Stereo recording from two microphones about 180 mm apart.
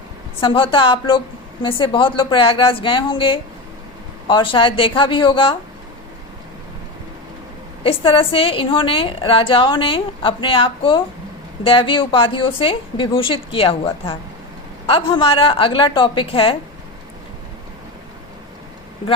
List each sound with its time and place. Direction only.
0.3 s a woman's voice: 30° left (ahead or behind)
7.9 s a woman's voice: 30° left (ahead or behind)